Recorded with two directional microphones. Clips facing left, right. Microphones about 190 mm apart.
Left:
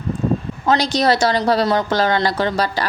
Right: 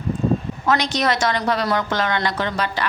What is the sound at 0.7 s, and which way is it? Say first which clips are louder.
A woman's voice: left 4 dB; 30° left (ahead or behind).